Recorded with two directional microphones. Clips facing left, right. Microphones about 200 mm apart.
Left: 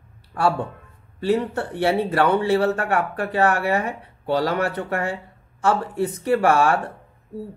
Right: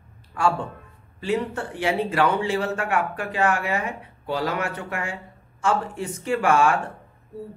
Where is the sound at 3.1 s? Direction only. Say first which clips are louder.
Left 3 dB; 35° left (ahead or behind).